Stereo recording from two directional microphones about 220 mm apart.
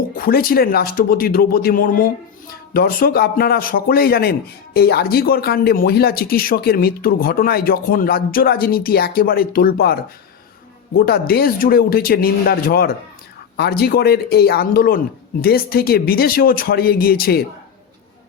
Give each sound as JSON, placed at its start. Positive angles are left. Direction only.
{"t": 0.2, "sound": "speech", "side_deg": 40}